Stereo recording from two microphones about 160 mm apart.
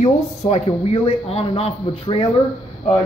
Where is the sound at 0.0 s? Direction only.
45° left (ahead or behind).